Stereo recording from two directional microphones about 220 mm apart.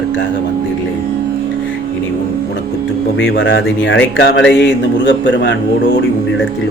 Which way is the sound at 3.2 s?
55° left (ahead or behind).